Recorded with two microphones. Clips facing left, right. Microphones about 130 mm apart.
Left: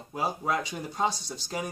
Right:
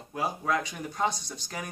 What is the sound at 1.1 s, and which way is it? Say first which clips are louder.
Speech: left 1 dB; 15° right (ahead or behind).